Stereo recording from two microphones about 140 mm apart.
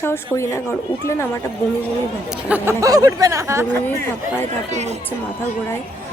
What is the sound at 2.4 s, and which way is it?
Speech, 10° right (ahead or behind).